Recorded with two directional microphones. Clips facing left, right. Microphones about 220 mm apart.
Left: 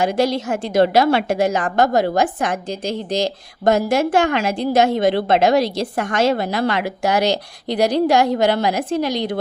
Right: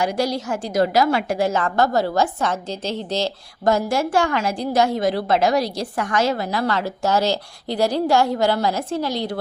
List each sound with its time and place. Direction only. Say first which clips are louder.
0.0 s a woman's voice: left 4 dB; 25° left (ahead or behind)